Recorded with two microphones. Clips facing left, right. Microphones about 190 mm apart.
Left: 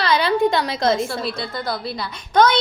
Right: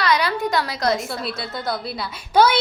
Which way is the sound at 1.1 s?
Centre (ahead or behind).